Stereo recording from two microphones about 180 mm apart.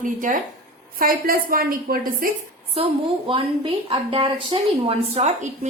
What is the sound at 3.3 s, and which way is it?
A woman's voice, 30° right (ahead or behind).